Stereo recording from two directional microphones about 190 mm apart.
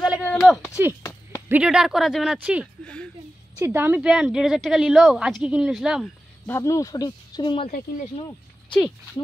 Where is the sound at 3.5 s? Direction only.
10° right (ahead or behind).